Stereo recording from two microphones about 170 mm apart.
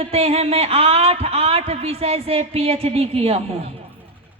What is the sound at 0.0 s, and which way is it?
A woman's voice, 35° right (ahead or behind).